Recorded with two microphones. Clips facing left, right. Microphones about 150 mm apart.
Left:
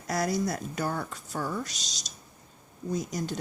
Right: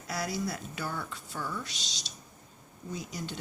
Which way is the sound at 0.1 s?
45° left (ahead or behind).